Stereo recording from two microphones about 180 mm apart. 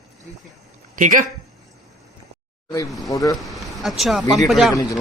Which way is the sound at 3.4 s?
Centre (ahead or behind).